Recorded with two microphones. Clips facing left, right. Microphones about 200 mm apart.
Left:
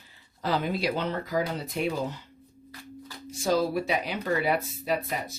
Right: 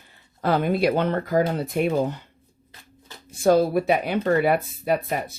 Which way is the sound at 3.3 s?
55° right (ahead or behind).